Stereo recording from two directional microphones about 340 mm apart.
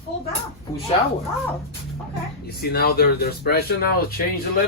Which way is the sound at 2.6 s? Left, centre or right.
Left.